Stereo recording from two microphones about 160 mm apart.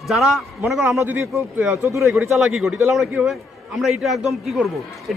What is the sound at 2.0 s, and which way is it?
A man's voice, centre (ahead or behind).